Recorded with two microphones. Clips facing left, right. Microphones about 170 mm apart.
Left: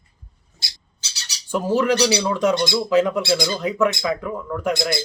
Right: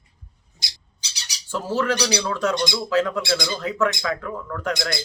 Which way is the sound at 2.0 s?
15° left (ahead or behind).